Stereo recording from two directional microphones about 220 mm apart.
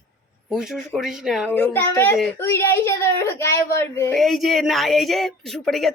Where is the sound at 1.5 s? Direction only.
10° left (ahead or behind).